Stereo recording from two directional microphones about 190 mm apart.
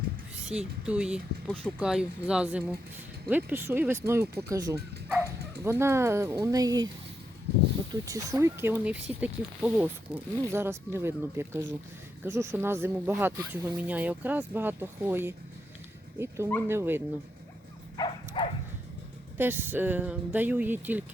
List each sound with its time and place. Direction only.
0.5 s speech: 5° right (ahead or behind)
8.0 s speech: 15° right (ahead or behind)
17.9 s dog: 25° left (ahead or behind)
19.4 s speech: 10° right (ahead or behind)